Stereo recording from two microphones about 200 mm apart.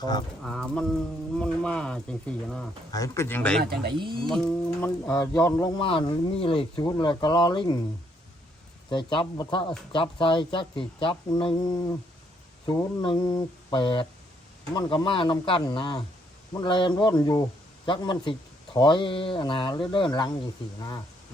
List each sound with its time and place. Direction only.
0.4 s speech: 5° left (ahead or behind)
2.9 s speech: 15° left (ahead or behind)
5.8 s speech: 25° left (ahead or behind)
8.9 s speech: 25° left (ahead or behind)